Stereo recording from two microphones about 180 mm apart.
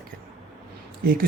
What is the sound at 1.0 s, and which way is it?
Speech, 55° right (ahead or behind).